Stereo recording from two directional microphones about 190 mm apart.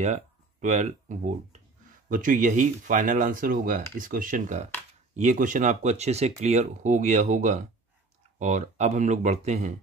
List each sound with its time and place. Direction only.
0.0 s speech: 40° right (ahead or behind)